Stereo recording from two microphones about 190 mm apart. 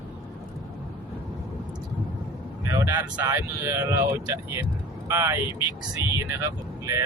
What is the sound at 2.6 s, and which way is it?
Speech, 15° right (ahead or behind).